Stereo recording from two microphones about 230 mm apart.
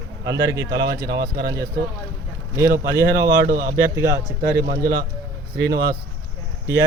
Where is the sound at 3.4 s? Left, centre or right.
Right.